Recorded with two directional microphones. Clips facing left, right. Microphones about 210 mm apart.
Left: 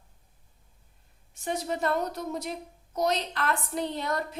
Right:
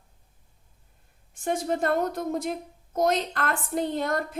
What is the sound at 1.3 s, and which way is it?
A woman's voice, 50° right (ahead or behind).